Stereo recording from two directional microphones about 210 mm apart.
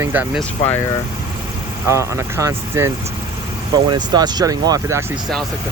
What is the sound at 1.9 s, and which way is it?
Speech, 15° right (ahead or behind).